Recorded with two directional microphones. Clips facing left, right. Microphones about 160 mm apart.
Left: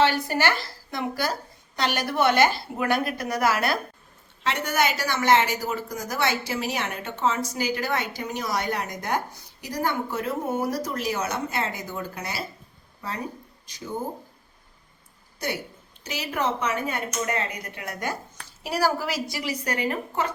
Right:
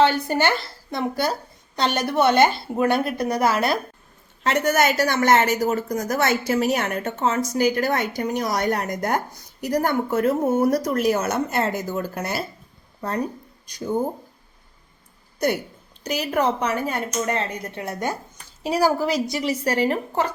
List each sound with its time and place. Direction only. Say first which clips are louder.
0.0 s a woman's voice: right 3 dB; 20° right (ahead or behind)
4.4 s a woman's voice: right 5 dB; 45° right (ahead or behind)
16.0 s a woman's voice: right 6 dB; 40° right (ahead or behind)